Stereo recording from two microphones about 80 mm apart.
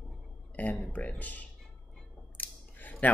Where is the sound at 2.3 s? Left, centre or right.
Left.